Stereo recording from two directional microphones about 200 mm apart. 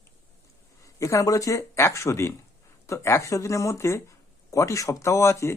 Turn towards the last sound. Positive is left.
turn(degrees=15)  # may be behind; listen again after turning